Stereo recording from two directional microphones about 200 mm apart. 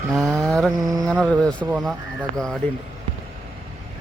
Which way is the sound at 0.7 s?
20° right (ahead or behind).